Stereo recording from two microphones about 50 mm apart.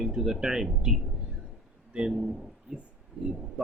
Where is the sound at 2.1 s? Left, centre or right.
Centre.